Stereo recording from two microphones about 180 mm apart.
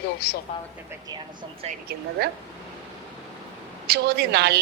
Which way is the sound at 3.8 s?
65° right (ahead or behind).